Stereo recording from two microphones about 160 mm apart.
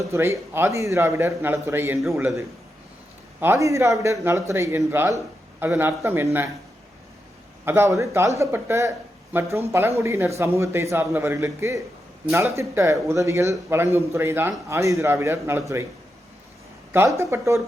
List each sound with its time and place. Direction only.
0.1 s a man's voice: 15° right (ahead or behind)
3.4 s a man's voice: 15° right (ahead or behind)
7.6 s a man's voice: 15° right (ahead or behind)
16.9 s a man's voice: 15° right (ahead or behind)